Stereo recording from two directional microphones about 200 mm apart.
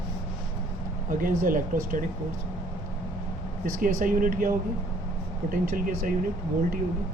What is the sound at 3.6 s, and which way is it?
Speech, 45° right (ahead or behind).